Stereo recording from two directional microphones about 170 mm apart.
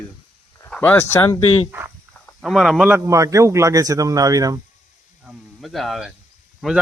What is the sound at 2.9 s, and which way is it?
Speech, 15° right (ahead or behind).